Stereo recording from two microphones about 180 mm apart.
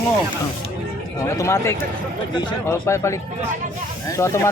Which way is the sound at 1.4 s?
15° left (ahead or behind).